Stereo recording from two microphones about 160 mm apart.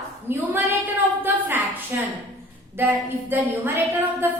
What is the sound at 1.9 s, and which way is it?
A woman's voice, 15° right (ahead or behind).